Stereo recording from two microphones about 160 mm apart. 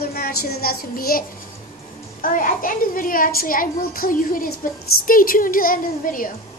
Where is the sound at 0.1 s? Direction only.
70° left (ahead or behind).